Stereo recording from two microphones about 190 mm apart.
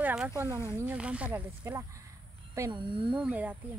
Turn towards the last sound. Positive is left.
turn(degrees=-10)  # may be behind; listen again after turning